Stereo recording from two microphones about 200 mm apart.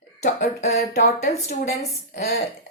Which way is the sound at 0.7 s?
50° left (ahead or behind).